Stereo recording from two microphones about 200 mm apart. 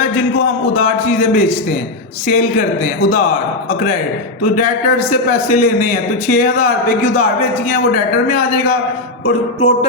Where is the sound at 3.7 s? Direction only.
40° left (ahead or behind).